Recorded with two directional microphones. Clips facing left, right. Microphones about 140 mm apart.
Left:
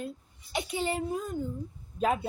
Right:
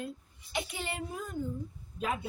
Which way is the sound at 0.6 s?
25° left (ahead or behind).